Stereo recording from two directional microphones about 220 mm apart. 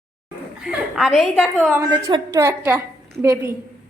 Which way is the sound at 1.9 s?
20° right (ahead or behind).